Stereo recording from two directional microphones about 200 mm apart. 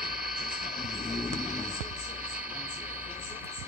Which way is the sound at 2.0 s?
5° right (ahead or behind).